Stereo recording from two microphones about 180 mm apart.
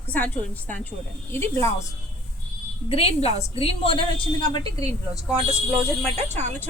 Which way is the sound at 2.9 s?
35° left (ahead or behind).